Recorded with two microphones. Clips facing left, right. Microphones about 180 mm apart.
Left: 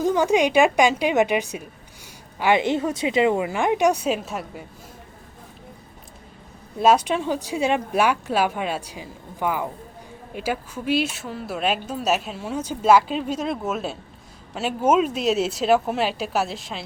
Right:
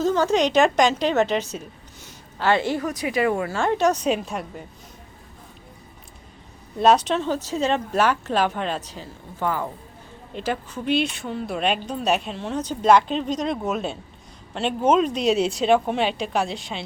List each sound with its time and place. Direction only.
0.0 s speech: 15° left (ahead or behind)
6.7 s speech: 10° left (ahead or behind)